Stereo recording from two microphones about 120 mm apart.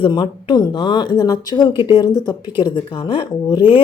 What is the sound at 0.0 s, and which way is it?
Speech, 40° left (ahead or behind).